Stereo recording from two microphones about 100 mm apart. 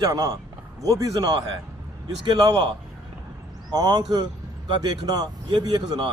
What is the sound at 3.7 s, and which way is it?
A man's voice, 45° right (ahead or behind).